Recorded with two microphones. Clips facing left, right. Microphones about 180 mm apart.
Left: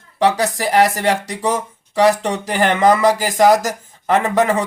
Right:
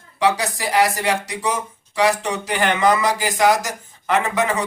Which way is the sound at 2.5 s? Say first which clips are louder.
Left 4 dB; 35° left (ahead or behind).